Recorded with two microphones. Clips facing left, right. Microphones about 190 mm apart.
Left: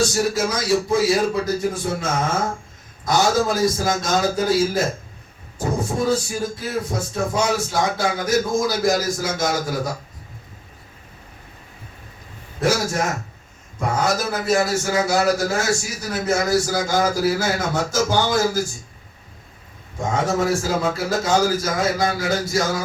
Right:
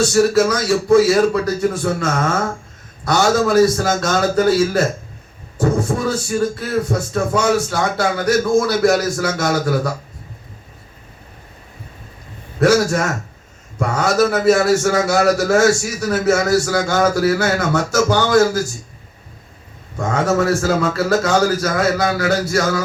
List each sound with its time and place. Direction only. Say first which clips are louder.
0.0 s a man's voice: right 7 dB; 65° right (ahead or behind)
12.5 s a man's voice: right 6 dB; 70° right (ahead or behind)
20.1 s a man's voice: right 4 dB; 70° right (ahead or behind)